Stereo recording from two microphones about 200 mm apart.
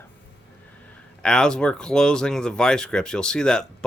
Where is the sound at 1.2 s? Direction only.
5° left (ahead or behind).